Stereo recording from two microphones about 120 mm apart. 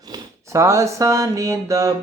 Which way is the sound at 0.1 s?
25° right (ahead or behind).